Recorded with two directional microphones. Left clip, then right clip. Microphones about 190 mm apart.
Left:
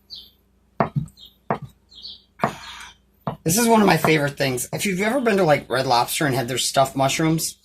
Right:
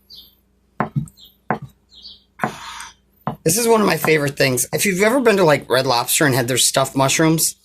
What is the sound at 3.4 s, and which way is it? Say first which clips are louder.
Speech: right 2 dB; 70° right (ahead or behind).